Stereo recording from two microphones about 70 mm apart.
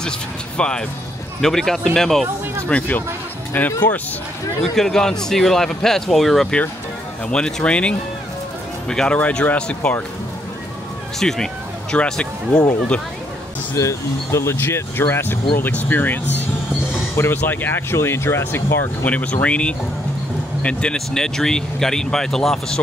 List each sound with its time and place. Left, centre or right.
0.6 s speech: centre
2.7 s speech: centre
4.7 s speech: centre
11.1 s speech: centre
13.7 s speech: left
17.2 s speech: left
19.0 s speech: left